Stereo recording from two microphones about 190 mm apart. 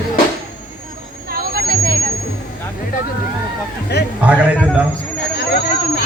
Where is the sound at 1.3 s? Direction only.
55° right (ahead or behind).